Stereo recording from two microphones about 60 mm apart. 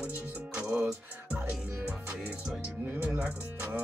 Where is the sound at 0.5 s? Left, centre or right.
Right.